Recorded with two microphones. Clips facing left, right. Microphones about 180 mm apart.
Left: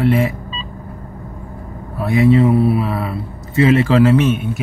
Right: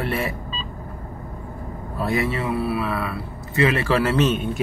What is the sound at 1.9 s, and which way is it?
A man's voice, 20° left (ahead or behind).